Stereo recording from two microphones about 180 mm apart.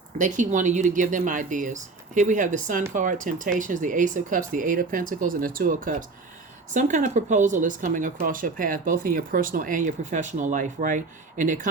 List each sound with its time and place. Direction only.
0.2 s speech: 45° right (ahead or behind)